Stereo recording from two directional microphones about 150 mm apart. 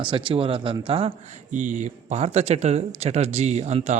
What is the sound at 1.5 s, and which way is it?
Speech, 55° right (ahead or behind).